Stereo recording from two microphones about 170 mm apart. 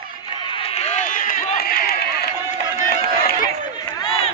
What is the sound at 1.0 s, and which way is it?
Run, 50° left (ahead or behind).